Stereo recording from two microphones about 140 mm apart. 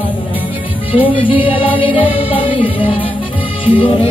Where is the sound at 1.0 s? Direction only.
40° left (ahead or behind).